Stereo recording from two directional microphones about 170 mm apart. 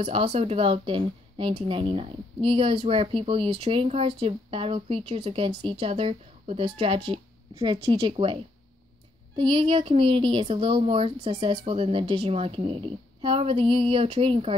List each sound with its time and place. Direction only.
0.0 s a woman's voice: 35° right (ahead or behind)
9.4 s a woman's voice: 30° right (ahead or behind)